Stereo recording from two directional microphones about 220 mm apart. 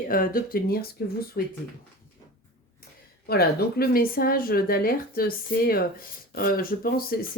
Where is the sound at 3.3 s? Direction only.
45° left (ahead or behind).